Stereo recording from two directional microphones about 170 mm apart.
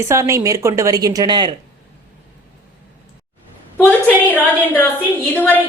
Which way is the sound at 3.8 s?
10° left (ahead or behind).